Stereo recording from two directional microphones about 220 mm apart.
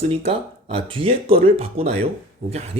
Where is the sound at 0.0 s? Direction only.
25° right (ahead or behind).